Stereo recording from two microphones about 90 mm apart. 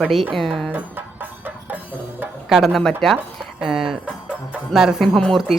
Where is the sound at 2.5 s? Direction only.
Centre (ahead or behind).